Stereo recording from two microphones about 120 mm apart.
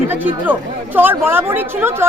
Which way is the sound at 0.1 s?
15° right (ahead or behind).